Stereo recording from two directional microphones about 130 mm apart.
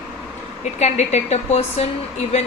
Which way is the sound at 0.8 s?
60° left (ahead or behind).